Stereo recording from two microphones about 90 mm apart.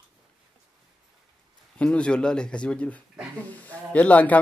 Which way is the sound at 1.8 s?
10° left (ahead or behind).